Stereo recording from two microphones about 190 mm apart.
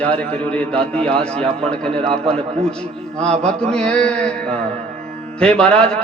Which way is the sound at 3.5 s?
5° left (ahead or behind).